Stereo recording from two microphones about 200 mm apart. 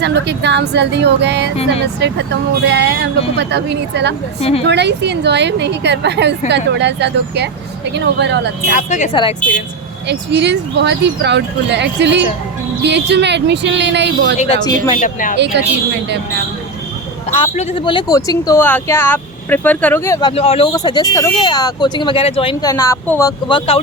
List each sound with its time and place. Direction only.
0.0 s speech: 60° right (ahead or behind)
4.4 s speech: 30° left (ahead or behind)
4.7 s speech: 60° right (ahead or behind)
8.7 s speech: 35° left (ahead or behind)
10.1 s speech: 60° right (ahead or behind)
14.9 s speech: 40° left (ahead or behind)
17.3 s speech: 30° left (ahead or behind)
20.3 s speech: 30° left (ahead or behind)
20.7 s speech: 20° left (ahead or behind)
22.6 s speech: 15° left (ahead or behind)
23.5 s speech: 25° left (ahead or behind)